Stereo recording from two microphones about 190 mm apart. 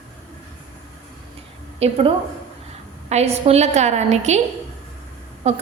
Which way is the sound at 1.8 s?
30° right (ahead or behind).